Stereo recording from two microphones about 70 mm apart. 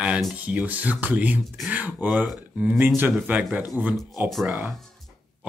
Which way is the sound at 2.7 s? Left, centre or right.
Right.